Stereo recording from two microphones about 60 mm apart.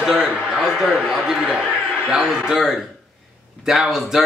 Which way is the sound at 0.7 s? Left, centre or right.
Centre.